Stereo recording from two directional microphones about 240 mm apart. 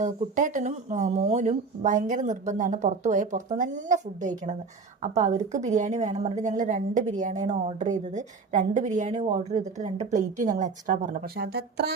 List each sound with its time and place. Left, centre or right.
0.0 s a woman's voice: right